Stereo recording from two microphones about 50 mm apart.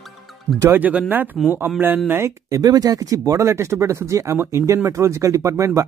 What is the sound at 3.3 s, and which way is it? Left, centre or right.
Speech, right.